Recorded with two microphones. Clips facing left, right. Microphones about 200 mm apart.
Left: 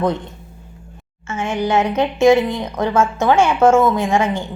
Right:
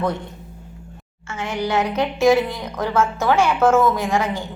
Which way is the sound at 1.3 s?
20° left (ahead or behind).